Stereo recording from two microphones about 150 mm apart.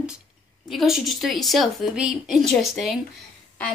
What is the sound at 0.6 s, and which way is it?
Speech, centre (ahead or behind).